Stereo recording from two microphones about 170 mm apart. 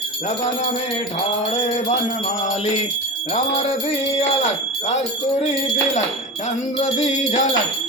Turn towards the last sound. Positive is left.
turn(degrees=40)  # may be behind; listen again after turning